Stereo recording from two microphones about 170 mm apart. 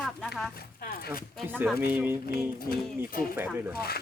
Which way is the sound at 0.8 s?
60° left (ahead or behind).